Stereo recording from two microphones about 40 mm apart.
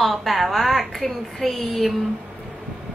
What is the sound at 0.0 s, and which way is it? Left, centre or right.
A woman's voice, centre.